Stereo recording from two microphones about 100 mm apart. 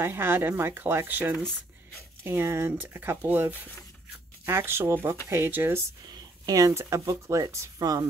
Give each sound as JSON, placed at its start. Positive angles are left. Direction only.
{"t": 0.0, "sound": "speech", "side_deg": -20}
{"t": 6.0, "sound": "speech", "side_deg": -35}